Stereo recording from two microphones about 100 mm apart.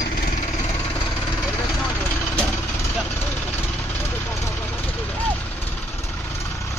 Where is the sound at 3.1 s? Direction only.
25° left (ahead or behind).